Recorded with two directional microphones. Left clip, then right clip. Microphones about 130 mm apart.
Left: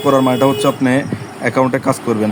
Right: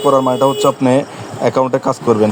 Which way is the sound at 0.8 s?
20° right (ahead or behind).